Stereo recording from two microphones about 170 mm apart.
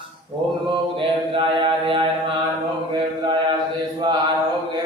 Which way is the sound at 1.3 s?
30° right (ahead or behind).